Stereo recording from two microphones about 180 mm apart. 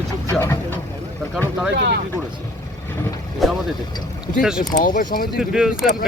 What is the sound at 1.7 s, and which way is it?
Speech, 70° right (ahead or behind).